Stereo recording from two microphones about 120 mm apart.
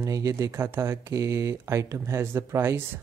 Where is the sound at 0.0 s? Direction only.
25° right (ahead or behind).